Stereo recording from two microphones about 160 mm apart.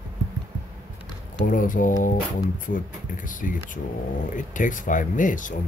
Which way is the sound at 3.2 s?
55° left (ahead or behind).